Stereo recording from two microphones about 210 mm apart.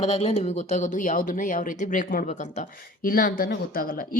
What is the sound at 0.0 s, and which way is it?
Speech, 30° left (ahead or behind).